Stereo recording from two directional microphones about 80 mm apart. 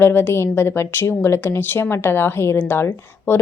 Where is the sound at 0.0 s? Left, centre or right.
Left.